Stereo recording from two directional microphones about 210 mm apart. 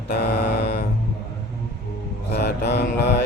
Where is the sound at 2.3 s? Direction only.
50° left (ahead or behind).